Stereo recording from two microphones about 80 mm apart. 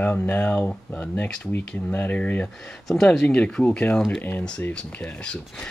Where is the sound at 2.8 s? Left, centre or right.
Centre.